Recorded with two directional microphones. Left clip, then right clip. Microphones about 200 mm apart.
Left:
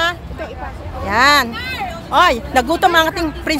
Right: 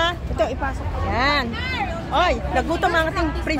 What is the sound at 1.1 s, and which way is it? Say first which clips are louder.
Speech: left 9 dB; 35° left (ahead or behind).